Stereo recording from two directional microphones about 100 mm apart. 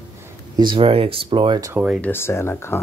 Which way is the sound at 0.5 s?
55° right (ahead or behind).